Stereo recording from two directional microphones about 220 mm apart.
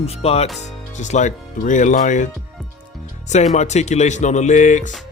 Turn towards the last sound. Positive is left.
turn(degrees=35)  # may be behind; listen again after turning